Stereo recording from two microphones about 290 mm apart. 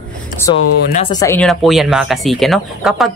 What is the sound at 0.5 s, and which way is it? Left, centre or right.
Speech, centre.